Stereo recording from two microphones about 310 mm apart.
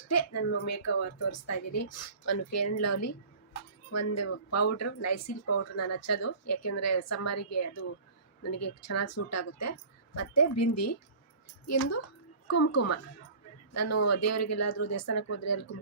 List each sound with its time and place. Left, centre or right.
0.1 s a woman's voice: left